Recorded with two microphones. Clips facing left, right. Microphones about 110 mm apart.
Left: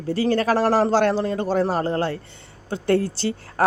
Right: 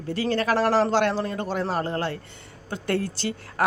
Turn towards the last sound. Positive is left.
turn(degrees=30)  # may be behind; listen again after turning